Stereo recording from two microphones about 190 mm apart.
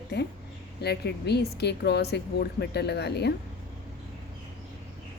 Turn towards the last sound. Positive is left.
turn(degrees=60)  # may be behind; listen again after turning